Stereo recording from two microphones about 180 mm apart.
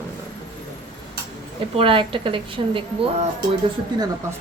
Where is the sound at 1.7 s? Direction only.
30° right (ahead or behind).